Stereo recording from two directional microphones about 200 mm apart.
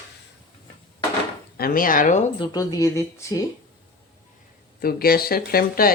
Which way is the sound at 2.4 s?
20° left (ahead or behind).